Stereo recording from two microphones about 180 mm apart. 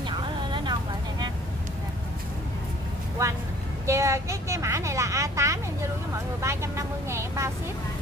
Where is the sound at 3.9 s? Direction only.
15° right (ahead or behind).